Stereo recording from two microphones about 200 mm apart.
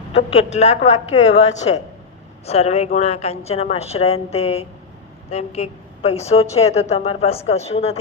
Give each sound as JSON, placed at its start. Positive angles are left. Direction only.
{"t": 0.1, "sound": "a woman's voice", "side_deg": 35}